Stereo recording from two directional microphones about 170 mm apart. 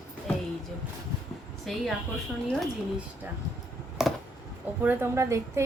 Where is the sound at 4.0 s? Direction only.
Centre (ahead or behind).